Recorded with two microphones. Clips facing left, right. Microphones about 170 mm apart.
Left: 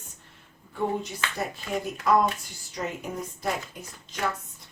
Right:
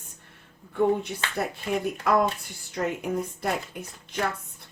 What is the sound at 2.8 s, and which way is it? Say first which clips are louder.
Speech: right 4 dB; 55° right (ahead or behind).